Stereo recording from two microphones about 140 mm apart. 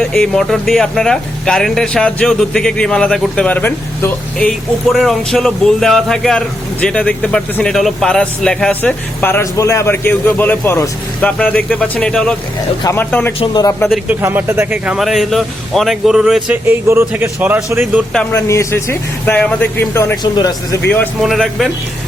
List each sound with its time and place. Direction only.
0.0 s speech: 5° left (ahead or behind)
13.4 s a man's voice: 30° left (ahead or behind)
13.9 s speech: 15° right (ahead or behind)
14.9 s speech: centre (ahead or behind)
18.3 s speech: 20° left (ahead or behind)
20.3 s speech: 30° left (ahead or behind)
20.8 s speech: 15° left (ahead or behind)
21.2 s speech: centre (ahead or behind)